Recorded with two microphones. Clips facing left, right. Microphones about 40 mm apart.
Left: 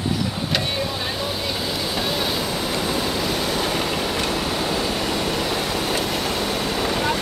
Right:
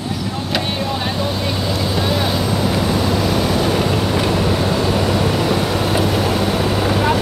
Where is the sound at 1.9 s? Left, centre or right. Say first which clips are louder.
Right 5 dB; centre.